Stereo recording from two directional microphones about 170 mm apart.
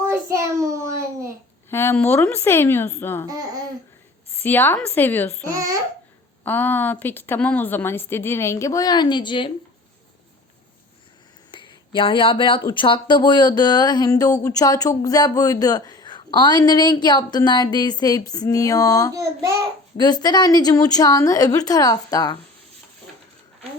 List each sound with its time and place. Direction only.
0.0 s child singing: 15° right (ahead or behind)
1.7 s a woman's voice: 15° left (ahead or behind)
4.4 s a woman's voice: 10° left (ahead or behind)
6.4 s a woman's voice: 10° left (ahead or behind); by 9.5 s 25° left (ahead or behind)
11.5 s speech: 30° left (ahead or behind)